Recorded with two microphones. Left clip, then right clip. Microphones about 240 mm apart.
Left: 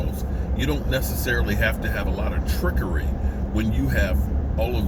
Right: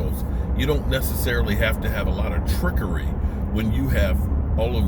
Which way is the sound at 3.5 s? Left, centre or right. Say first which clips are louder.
Even; centre.